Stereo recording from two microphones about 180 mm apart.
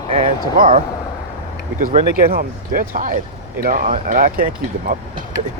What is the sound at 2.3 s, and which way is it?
Speech, 55° right (ahead or behind).